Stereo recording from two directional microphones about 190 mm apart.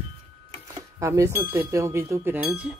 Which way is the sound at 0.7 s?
15° right (ahead or behind).